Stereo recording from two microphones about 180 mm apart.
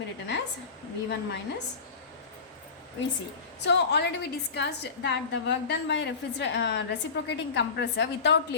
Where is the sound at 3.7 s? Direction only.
70° left (ahead or behind).